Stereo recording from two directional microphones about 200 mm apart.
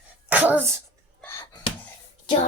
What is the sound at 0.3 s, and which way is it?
Throat clearing, 10° right (ahead or behind).